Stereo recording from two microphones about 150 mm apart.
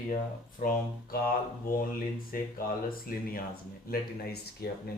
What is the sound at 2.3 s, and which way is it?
Speech, 75° left (ahead or behind).